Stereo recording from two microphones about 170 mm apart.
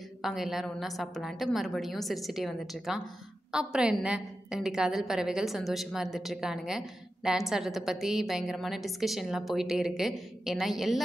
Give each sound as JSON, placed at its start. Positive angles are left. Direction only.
{"t": 0.2, "sound": "a woman's voice", "side_deg": 0}